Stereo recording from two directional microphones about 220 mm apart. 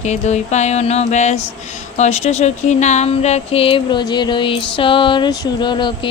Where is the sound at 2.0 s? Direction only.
30° left (ahead or behind).